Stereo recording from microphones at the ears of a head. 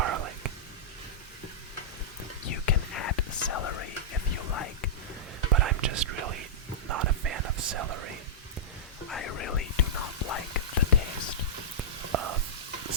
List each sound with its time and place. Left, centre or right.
0.0 s whispering: right
2.4 s whispering: left
5.5 s whispering: right
9.1 s whispering: left
11.8 s whispering: right